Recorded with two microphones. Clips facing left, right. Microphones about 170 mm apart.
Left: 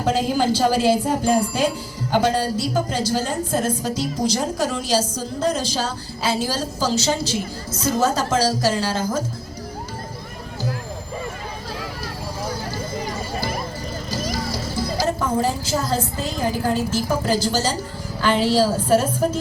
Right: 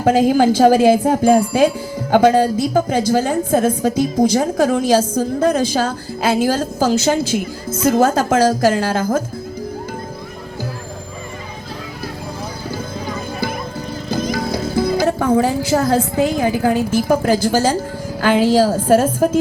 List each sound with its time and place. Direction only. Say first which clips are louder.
0.0 s speech: right 7 dB; 50° right (ahead or behind)
14.1 s speech: right 7 dB; 55° right (ahead or behind)